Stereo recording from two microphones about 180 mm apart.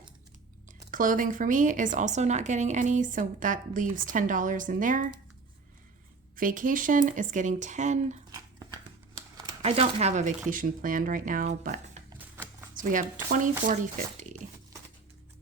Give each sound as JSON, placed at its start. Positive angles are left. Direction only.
{"t": 0.9, "sound": "a woman's voice", "side_deg": -50}
{"t": 6.3, "sound": "a woman's voice", "side_deg": -50}
{"t": 9.6, "sound": "a woman's voice", "side_deg": -35}